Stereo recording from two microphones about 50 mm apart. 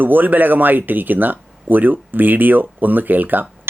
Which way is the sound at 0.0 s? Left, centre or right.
Right.